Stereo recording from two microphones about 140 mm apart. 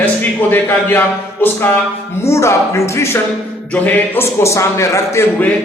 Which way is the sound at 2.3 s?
20° left (ahead or behind).